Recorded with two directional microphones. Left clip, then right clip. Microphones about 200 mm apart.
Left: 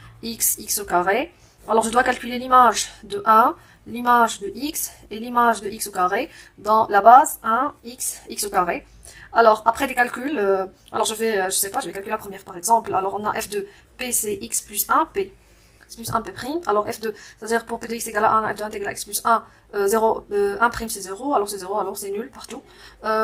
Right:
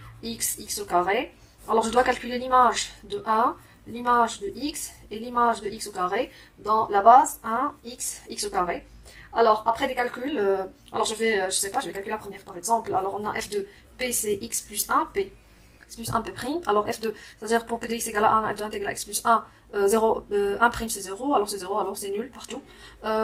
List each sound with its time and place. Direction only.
0.2 s a woman's voice: 30° left (ahead or behind)
10.3 s a woman's voice: 20° left (ahead or behind)